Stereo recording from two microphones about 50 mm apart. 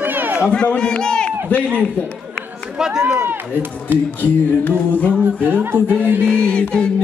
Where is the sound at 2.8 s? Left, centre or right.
Centre.